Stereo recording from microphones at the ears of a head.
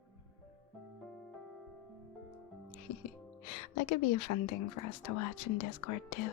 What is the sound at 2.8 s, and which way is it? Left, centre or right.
Speech, left.